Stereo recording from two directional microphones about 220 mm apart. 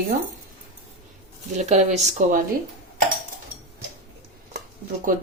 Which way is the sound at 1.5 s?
35° right (ahead or behind).